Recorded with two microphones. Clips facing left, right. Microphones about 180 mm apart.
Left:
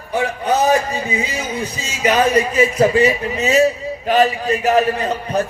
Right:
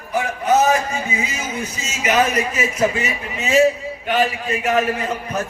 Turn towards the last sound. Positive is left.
turn(degrees=35)  # may be behind; listen again after turning